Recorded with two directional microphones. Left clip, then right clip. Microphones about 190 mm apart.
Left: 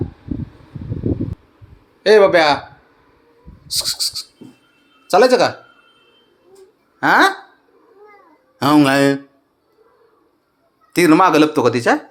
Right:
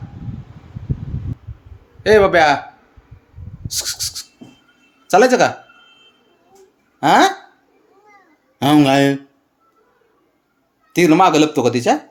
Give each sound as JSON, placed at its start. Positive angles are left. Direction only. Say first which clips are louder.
{"t": 2.0, "sound": "speech", "louder": "left 1 dB", "side_deg": -10}
{"t": 3.8, "sound": "a sound", "louder": "left 3 dB", "side_deg": -20}
{"t": 5.1, "sound": "speech", "louder": "even", "side_deg": -20}
{"t": 7.0, "sound": "speech", "louder": "even", "side_deg": -15}
{"t": 8.5, "sound": "speech", "louder": "even", "side_deg": -20}
{"t": 10.9, "sound": "speech", "louder": "even", "side_deg": -15}